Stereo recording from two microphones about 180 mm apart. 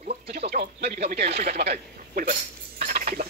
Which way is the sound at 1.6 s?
45° right (ahead or behind).